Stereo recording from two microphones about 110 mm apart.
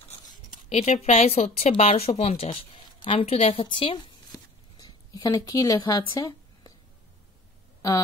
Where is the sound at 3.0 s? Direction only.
55° left (ahead or behind).